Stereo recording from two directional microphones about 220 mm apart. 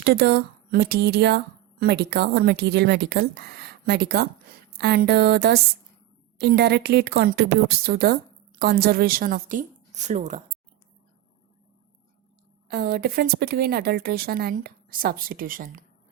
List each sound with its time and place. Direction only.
0.0 s a woman's voice: 45° right (ahead or behind)
12.6 s a woman's voice: 45° right (ahead or behind)